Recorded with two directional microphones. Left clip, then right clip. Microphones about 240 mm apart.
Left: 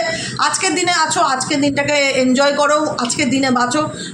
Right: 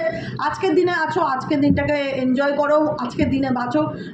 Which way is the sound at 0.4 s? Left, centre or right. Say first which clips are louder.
Left 2 dB; left.